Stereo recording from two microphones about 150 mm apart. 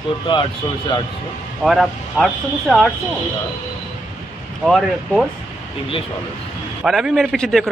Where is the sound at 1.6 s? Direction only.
Centre (ahead or behind).